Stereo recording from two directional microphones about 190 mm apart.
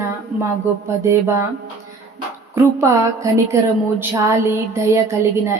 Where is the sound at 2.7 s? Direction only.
15° right (ahead or behind).